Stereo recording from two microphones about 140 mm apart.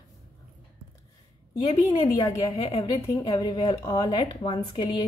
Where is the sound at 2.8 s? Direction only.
25° left (ahead or behind).